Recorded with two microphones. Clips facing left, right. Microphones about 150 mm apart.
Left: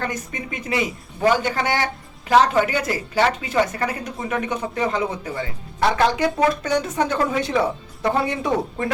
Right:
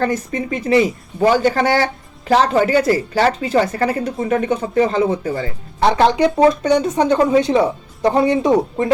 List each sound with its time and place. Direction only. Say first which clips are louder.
0.0 s a woman's voice: right 9 dB; 35° right (ahead or behind)
6.0 s speech: right 7 dB; 20° right (ahead or behind)